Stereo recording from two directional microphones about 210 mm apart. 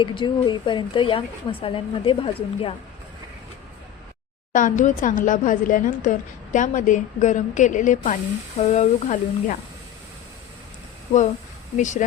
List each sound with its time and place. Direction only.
0.0 s speech: 25° left (ahead or behind)
4.5 s speech: 40° left (ahead or behind)
11.8 s speech: 35° left (ahead or behind)